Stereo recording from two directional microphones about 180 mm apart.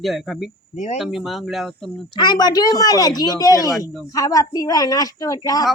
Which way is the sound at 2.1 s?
25° left (ahead or behind).